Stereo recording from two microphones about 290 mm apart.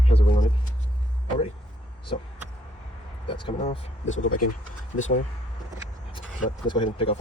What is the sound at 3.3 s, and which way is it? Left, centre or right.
Speech, centre.